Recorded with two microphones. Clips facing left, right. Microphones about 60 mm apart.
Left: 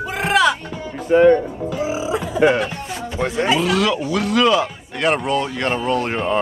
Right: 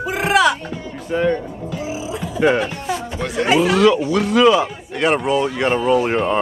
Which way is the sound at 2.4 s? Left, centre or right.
Centre.